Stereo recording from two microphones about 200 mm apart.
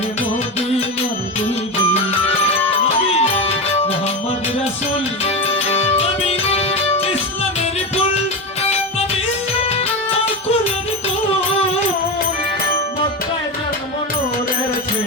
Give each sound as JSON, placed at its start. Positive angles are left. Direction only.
{"t": 3.1, "sound": "music", "side_deg": 30}
{"t": 5.2, "sound": "music", "side_deg": 30}